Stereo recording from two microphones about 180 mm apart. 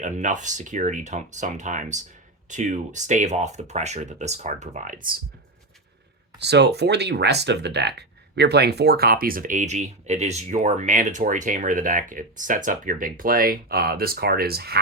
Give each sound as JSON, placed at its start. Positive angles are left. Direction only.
{"t": 0.0, "sound": "speech", "side_deg": -45}
{"t": 6.4, "sound": "speech", "side_deg": -70}